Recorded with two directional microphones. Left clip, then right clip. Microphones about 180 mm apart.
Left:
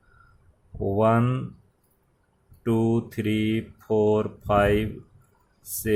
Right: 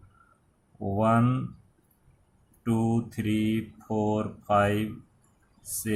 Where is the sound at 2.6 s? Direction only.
40° left (ahead or behind).